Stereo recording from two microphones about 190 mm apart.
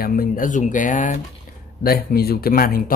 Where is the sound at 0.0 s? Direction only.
50° left (ahead or behind).